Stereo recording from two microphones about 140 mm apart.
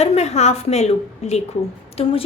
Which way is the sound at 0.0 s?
50° left (ahead or behind).